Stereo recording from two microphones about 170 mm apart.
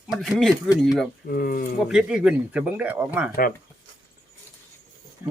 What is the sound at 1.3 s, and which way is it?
Speech, 60° left (ahead or behind).